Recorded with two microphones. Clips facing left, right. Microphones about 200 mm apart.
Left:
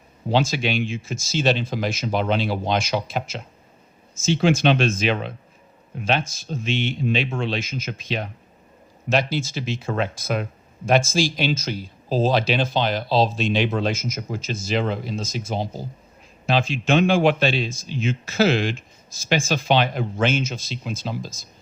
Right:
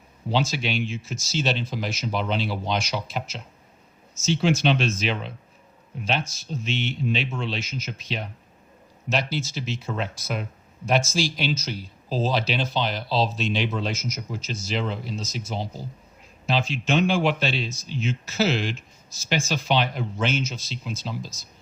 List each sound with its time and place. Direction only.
0.3 s speech: 50° left (ahead or behind)